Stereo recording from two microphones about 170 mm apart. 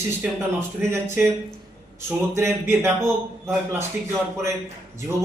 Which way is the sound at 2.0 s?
15° right (ahead or behind).